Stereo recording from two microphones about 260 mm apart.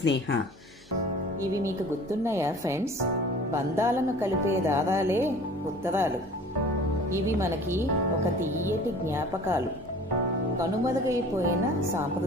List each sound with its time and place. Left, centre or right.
0.0 s speech: left
2.2 s a woman's voice: centre
7.3 s a woman's voice: centre
9.0 s a woman's voice: centre
10.6 s a woman's voice: centre